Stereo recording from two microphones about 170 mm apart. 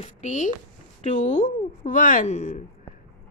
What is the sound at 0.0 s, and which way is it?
A woman's voice, 45° left (ahead or behind).